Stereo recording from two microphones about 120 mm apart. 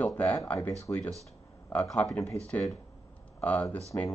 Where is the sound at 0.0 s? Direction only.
10° left (ahead or behind).